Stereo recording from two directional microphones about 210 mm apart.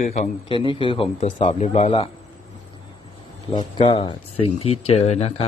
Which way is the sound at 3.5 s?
25° left (ahead or behind).